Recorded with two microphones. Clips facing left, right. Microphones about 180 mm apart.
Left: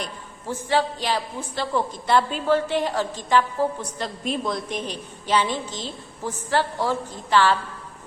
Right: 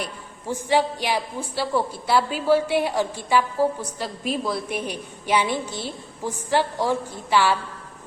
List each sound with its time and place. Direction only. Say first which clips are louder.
0.0 s a woman's voice: right 1 dB; 15° right (ahead or behind)